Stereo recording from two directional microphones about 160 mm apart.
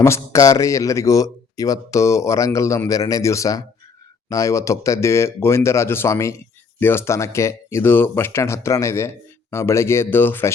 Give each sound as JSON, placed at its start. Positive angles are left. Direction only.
{"t": 0.0, "sound": "speech", "side_deg": 20}